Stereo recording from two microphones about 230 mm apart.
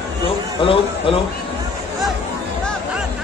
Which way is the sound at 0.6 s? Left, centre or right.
Left.